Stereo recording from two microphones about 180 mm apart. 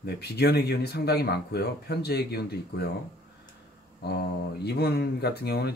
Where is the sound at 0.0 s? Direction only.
65° left (ahead or behind).